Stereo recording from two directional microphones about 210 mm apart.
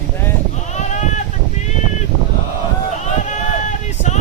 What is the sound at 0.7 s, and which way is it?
Sheep, 35° left (ahead or behind).